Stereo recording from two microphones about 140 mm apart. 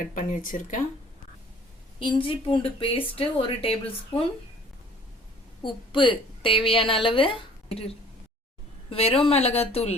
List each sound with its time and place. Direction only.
0.0 s speech: 60° left (ahead or behind)
2.0 s a woman's voice: 35° left (ahead or behind)
5.6 s a woman's voice: 35° left (ahead or behind)